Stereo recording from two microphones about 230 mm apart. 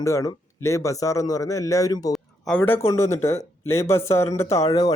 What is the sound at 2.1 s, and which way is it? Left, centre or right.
Speech, centre.